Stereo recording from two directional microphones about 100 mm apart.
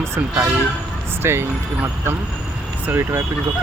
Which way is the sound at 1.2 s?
25° right (ahead or behind).